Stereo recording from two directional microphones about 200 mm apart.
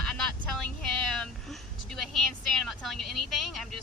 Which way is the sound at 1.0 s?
Centre (ahead or behind).